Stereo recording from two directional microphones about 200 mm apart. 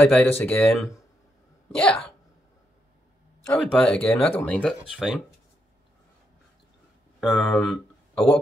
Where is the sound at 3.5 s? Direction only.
5° left (ahead or behind).